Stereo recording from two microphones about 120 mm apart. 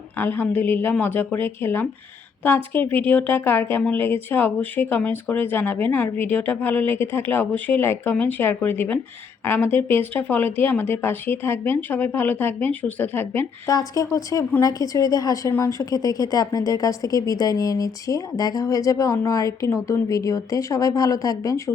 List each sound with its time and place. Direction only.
0.2 s speech: 20° left (ahead or behind)
13.7 s a woman's voice: 30° left (ahead or behind)